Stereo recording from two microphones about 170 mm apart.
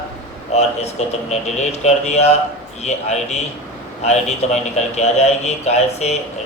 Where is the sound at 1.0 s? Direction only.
40° left (ahead or behind).